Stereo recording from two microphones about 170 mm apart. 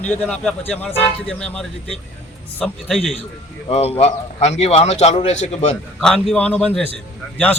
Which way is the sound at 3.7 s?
35° left (ahead or behind).